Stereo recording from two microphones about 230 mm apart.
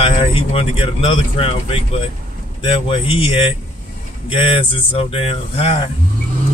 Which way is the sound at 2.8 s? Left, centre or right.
Left.